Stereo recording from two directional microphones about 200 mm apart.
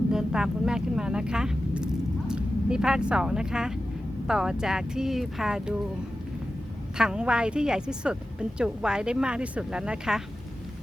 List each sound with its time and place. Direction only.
0.1 s a woman's voice: 5° right (ahead or behind)
6.9 s a woman's voice: 5° right (ahead or behind)